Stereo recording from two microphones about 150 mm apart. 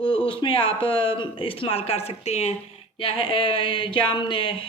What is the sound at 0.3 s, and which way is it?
Speech, 35° left (ahead or behind).